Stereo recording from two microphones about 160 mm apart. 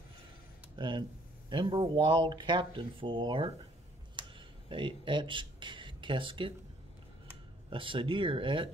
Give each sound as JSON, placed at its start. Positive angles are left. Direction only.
{"t": 0.7, "sound": "speech", "side_deg": -30}
{"t": 4.2, "sound": "a sound", "side_deg": -30}
{"t": 7.7, "sound": "speech", "side_deg": -30}